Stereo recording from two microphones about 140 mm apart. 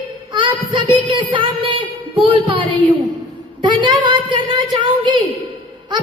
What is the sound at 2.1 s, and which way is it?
Speech, 40° right (ahead or behind).